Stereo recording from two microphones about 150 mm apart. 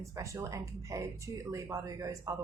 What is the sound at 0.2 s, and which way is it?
A woman's voice, 20° right (ahead or behind).